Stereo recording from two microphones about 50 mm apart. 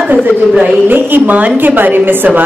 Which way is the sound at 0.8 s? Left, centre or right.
Right.